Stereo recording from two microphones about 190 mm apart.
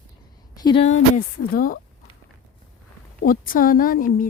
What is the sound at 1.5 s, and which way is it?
Speech, 50° left (ahead or behind).